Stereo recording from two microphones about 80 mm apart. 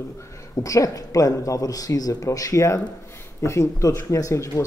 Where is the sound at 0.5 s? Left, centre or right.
Left.